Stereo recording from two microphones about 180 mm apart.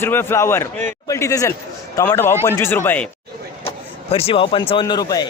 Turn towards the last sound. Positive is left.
turn(degrees=20)  # may be behind; listen again after turning